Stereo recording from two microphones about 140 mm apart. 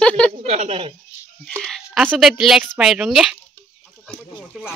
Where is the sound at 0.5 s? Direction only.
50° right (ahead or behind).